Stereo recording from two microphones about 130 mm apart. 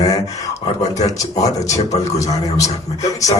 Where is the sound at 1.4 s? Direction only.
25° left (ahead or behind).